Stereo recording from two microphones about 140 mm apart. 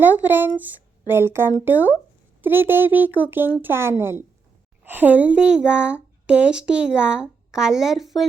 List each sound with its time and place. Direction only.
0.0 s speech: 15° right (ahead or behind)